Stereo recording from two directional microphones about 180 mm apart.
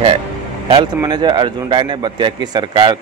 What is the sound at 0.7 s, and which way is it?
A man's voice, 30° right (ahead or behind).